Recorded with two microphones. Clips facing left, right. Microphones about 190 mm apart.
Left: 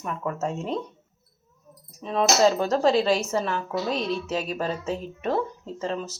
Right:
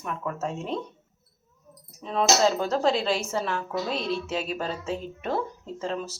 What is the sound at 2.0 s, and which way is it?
Speech, centre (ahead or behind).